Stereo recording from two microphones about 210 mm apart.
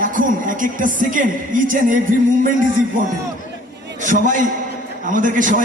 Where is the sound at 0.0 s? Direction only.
40° right (ahead or behind).